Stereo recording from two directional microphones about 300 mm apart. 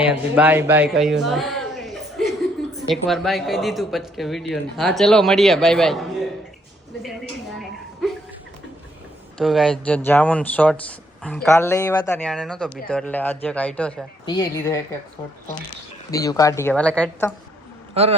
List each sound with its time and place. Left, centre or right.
0.0 s speech: centre
1.2 s a sound: centre
2.9 s speech: centre
9.4 s speech: centre
16.1 s speech: centre
18.0 s a man's voice: centre